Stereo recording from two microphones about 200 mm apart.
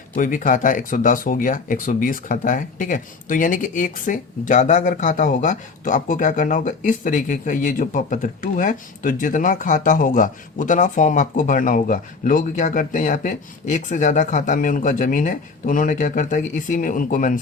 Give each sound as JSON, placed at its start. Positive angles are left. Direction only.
{"t": 0.2, "sound": "speech", "side_deg": 40}